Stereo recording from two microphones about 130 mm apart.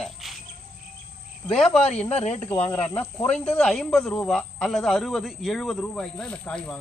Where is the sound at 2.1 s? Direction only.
60° left (ahead or behind).